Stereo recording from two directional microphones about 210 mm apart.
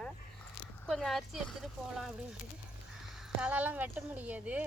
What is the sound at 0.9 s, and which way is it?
Speech, centre (ahead or behind).